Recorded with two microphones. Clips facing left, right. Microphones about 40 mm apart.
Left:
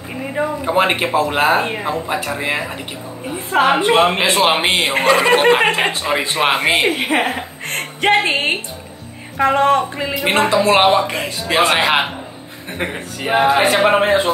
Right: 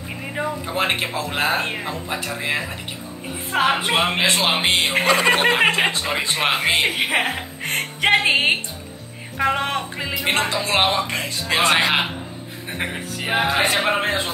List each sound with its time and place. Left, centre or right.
0.2 s speech: centre
0.7 s speech: centre
4.9 s speech: centre
6.9 s music: centre
10.2 s speech: centre
12.7 s speech: centre